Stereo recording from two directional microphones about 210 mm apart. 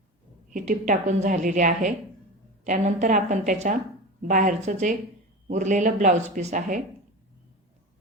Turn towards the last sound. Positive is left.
turn(degrees=-35)  # may be behind; listen again after turning